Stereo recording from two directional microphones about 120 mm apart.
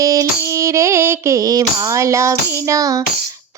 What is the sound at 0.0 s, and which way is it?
Music, 30° right (ahead or behind).